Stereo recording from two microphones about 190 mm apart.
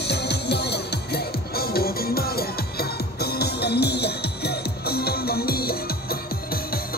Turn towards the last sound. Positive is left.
turn(degrees=55)  # may be behind; listen again after turning